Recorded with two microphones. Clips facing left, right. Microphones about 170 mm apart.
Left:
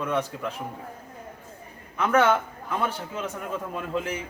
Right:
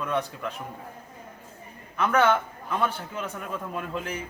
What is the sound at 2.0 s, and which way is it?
Speech, 10° left (ahead or behind).